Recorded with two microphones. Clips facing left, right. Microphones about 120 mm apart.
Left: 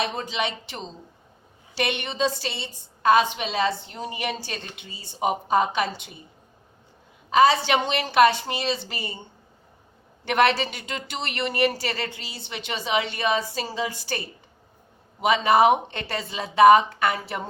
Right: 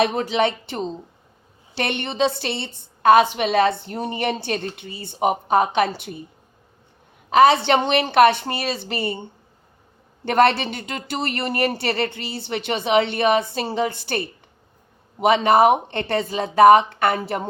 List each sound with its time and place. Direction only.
0.0 s a woman's voice: 55° right (ahead or behind)
1.7 s a woman's voice: 60° right (ahead or behind)
7.3 s a woman's voice: 55° right (ahead or behind)
10.2 s speech: 45° right (ahead or behind)
10.5 s speech: 55° right (ahead or behind)
11.3 s speech: 35° right (ahead or behind)
11.5 s a woman's voice: 55° right (ahead or behind)